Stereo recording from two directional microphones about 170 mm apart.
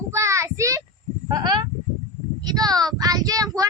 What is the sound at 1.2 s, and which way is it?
Speech, 25° right (ahead or behind).